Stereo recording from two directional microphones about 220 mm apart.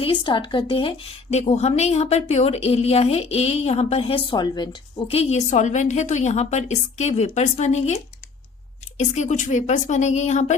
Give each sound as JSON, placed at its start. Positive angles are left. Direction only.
{"t": 0.0, "sound": "a woman's voice", "side_deg": 20}
{"t": 9.1, "sound": "a woman's voice", "side_deg": 30}